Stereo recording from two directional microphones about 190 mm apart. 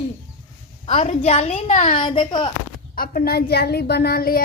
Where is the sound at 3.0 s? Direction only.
50° left (ahead or behind).